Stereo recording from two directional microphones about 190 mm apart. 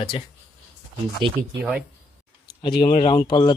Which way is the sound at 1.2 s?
25° right (ahead or behind).